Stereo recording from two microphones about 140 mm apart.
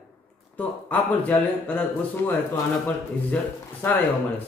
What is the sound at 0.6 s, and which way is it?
A man's voice, 10° left (ahead or behind).